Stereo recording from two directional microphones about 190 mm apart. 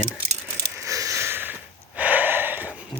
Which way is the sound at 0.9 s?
15° right (ahead or behind).